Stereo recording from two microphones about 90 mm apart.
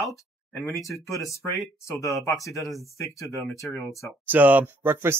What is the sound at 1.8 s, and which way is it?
Speech, 35° left (ahead or behind).